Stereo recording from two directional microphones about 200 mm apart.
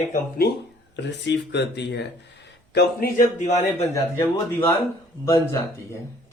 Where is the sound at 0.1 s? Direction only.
50° left (ahead or behind).